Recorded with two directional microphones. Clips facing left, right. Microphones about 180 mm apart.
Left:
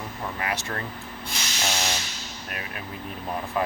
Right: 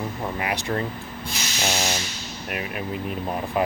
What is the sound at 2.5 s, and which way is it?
Speech, 15° right (ahead or behind).